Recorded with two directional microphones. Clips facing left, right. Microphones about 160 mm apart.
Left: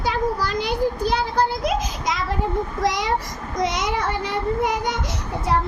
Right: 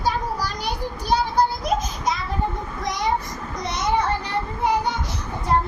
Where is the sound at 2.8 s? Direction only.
90° left.